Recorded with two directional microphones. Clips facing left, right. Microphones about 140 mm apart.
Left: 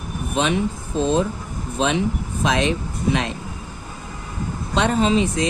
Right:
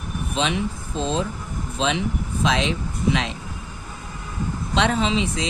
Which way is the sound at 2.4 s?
55° left (ahead or behind).